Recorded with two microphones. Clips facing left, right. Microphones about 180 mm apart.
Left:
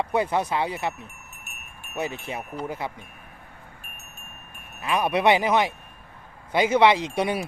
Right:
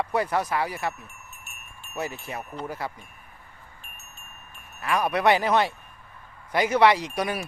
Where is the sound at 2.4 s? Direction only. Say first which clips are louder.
Left 1 dB; 15° left (ahead or behind).